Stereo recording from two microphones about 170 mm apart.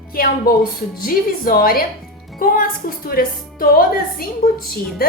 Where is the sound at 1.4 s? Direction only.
60° left (ahead or behind).